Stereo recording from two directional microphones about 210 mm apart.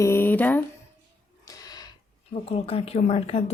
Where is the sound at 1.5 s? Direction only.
20° left (ahead or behind).